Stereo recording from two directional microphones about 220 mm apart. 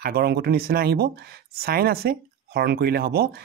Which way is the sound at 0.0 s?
45° right (ahead or behind).